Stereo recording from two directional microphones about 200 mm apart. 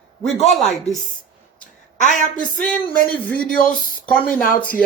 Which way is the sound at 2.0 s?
40° left (ahead or behind).